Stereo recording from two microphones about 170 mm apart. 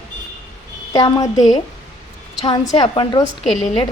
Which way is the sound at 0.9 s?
25° left (ahead or behind).